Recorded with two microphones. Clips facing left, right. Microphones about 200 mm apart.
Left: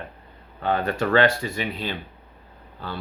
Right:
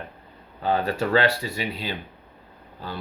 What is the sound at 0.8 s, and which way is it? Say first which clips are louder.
Speech: left 4 dB; 40° right (ahead or behind).